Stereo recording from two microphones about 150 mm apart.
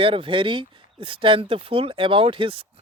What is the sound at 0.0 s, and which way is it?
Speech, 35° right (ahead or behind).